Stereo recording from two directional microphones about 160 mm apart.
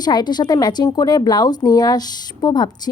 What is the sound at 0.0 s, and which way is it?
Speech, 25° left (ahead or behind).